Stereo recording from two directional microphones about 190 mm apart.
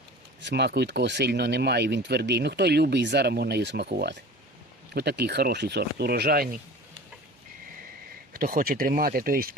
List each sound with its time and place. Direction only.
0.4 s speech: 60° right (ahead or behind)
8.3 s speech: 50° right (ahead or behind)